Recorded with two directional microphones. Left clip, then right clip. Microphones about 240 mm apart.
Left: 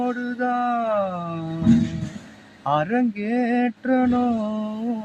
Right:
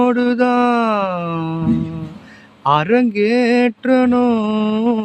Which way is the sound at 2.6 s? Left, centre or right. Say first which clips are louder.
Right 7 dB; right.